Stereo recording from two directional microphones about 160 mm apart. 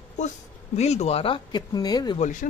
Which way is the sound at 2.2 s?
55° left (ahead or behind).